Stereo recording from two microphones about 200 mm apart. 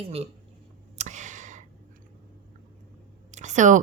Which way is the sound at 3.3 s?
35° right (ahead or behind).